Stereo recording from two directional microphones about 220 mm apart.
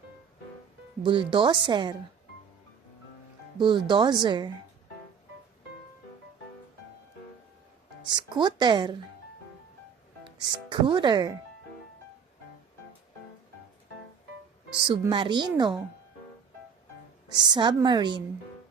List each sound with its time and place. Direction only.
1.0 s speech: 20° right (ahead or behind)
3.6 s speech: 20° right (ahead or behind)
8.1 s speech: 20° right (ahead or behind)
10.4 s speech: 20° right (ahead or behind)
14.8 s speech: 20° right (ahead or behind)
17.3 s speech: 20° right (ahead or behind)